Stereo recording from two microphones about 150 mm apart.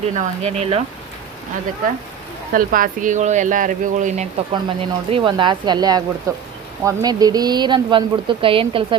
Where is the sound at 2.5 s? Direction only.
70° right (ahead or behind).